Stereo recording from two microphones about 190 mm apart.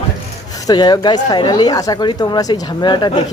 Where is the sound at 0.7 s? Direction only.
20° left (ahead or behind).